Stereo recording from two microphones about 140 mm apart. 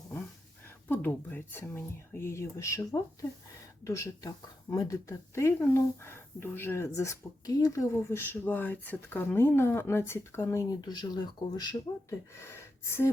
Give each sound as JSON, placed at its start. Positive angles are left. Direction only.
{"t": 0.9, "sound": "speech", "side_deg": 15}
{"t": 12.4, "sound": "speech", "side_deg": 20}